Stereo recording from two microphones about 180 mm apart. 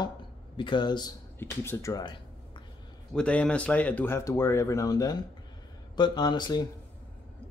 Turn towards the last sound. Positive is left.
turn(degrees=25)  # may be behind; listen again after turning